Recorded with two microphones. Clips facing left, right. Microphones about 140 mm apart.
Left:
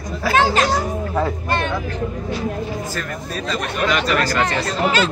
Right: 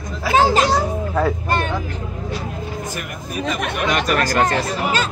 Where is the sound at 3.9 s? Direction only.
45° right (ahead or behind).